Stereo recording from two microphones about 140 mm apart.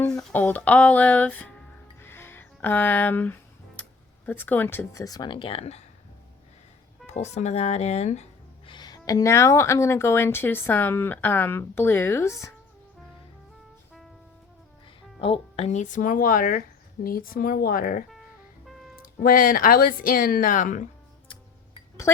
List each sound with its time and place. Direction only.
0.3 s a woman's voice: 10° left (ahead or behind)
2.0 s music: 15° left (ahead or behind)
4.3 s speech: 15° left (ahead or behind); by 5.8 s 45° left (ahead or behind)
7.1 s speech: 55° left (ahead or behind)
8.6 s a woman's voice: 35° left (ahead or behind)
15.2 s speech: 45° left (ahead or behind); by 18.0 s 90° left
18.6 s music: centre (ahead or behind)
19.0 s speech: 90° left; by 20.8 s 65° left (ahead or behind)